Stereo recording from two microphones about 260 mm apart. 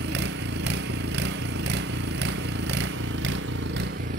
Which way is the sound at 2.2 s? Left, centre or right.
Right.